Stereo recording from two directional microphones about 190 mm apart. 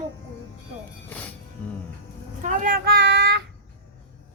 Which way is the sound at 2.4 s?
45° right (ahead or behind).